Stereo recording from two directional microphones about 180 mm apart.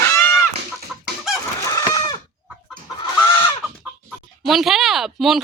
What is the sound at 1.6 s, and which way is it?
Chicken, 20° left (ahead or behind).